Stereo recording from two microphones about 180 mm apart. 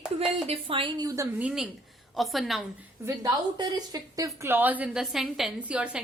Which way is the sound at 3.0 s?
20° right (ahead or behind).